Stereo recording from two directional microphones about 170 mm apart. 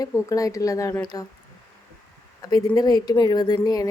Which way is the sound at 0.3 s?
20° left (ahead or behind).